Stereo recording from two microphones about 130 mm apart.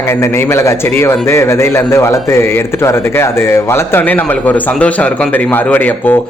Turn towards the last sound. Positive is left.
turn(degrees=15)  # may be behind; listen again after turning